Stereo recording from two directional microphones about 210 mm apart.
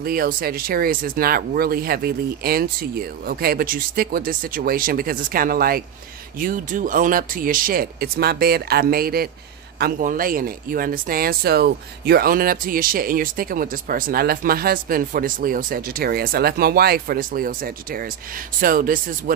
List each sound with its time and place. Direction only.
0.0 s speech: 45° right (ahead or behind)